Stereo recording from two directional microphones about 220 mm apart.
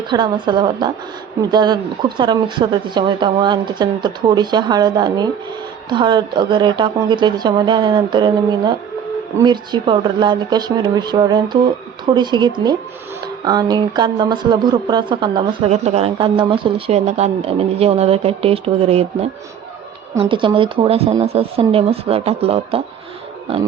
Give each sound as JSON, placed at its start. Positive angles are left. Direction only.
{"t": 0.1, "sound": "speech", "side_deg": -20}